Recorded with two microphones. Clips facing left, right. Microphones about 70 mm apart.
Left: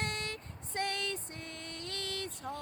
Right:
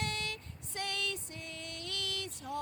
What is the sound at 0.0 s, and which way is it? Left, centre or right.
Vehicle, left.